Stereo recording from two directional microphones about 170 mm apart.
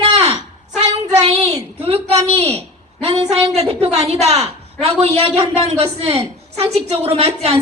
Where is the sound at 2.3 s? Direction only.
35° right (ahead or behind).